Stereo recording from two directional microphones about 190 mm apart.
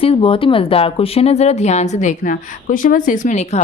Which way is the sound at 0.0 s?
30° left (ahead or behind).